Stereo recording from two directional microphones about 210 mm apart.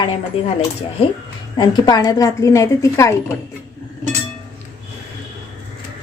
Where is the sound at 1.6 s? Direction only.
20° left (ahead or behind).